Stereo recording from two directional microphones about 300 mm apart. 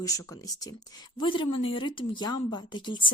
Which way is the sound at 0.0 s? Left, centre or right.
Centre.